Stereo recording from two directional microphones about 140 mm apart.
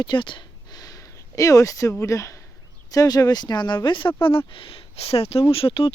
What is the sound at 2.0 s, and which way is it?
Speech, 20° left (ahead or behind).